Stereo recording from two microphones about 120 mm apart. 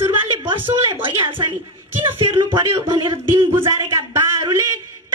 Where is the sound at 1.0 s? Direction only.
45° right (ahead or behind).